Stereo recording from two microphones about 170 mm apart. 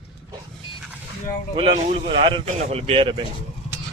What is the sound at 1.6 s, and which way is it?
Speech, 35° right (ahead or behind).